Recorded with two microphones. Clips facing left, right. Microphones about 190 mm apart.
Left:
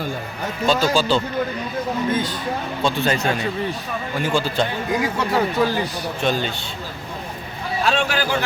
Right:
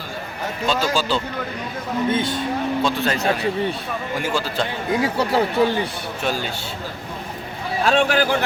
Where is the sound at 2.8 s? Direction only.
Centre (ahead or behind).